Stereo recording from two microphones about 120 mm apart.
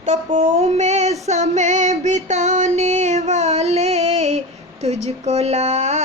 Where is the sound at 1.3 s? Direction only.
70° right (ahead or behind).